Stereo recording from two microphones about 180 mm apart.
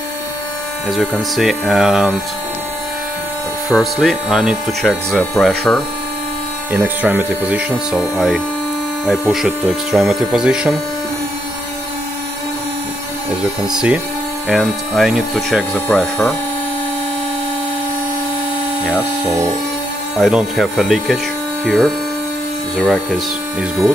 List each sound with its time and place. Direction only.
0.8 s speech: centre (ahead or behind)
3.6 s speech: centre (ahead or behind)
6.7 s speech: 10° right (ahead or behind)
13.4 s speech: 5° right (ahead or behind)
18.9 s speech: 5° right (ahead or behind)